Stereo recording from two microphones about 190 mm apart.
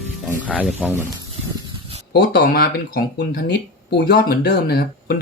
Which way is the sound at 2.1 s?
50° left (ahead or behind).